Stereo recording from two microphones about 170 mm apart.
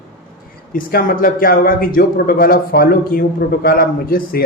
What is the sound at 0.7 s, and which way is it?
A man's voice, 55° left (ahead or behind).